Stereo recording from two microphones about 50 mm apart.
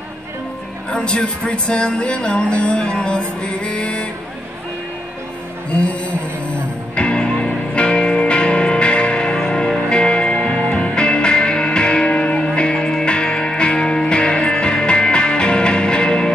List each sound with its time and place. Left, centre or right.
0.8 s speech: centre
5.7 s speech: left
6.5 s music: left